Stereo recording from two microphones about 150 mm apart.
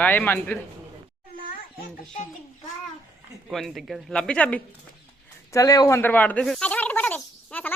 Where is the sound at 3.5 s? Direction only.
Centre (ahead or behind).